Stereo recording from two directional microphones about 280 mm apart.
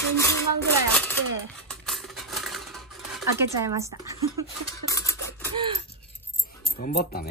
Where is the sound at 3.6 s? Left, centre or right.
Centre.